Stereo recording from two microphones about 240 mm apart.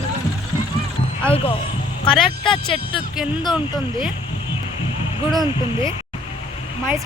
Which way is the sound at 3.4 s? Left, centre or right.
Centre.